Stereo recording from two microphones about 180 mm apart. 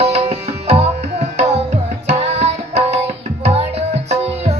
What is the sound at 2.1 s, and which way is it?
Tabla, 35° right (ahead or behind).